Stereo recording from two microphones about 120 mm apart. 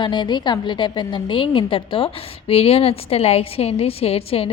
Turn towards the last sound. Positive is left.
turn(degrees=55)  # may be behind; listen again after turning